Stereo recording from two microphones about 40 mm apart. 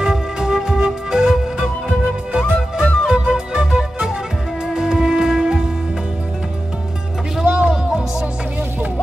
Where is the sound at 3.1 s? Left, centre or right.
Right.